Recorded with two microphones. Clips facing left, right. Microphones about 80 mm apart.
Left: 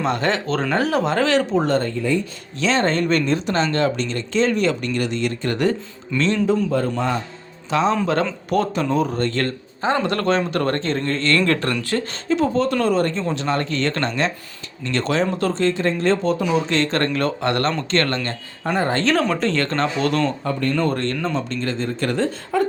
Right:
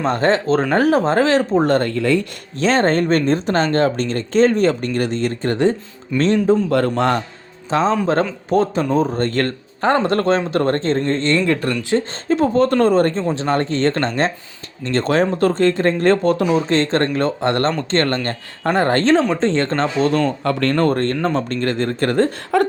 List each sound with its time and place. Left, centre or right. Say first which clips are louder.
0.0 s speech: right 4 dB; right
1.7 s speech: right 4 dB; right
2.6 s speech: right 4 dB; right
6.7 s a man's voice: right 4 dB; right
7.7 s speech: right 2 dB; right; by 12.0 s centre
12.3 s speech: right 4 dB; right
16.5 s speech: right 3 dB; right
18.6 s speech: right 4 dB; right
19.4 s speech: right 3 dB; right
20.4 s a man's voice: right 4 dB; right
20.8 s speech: right 5 dB; right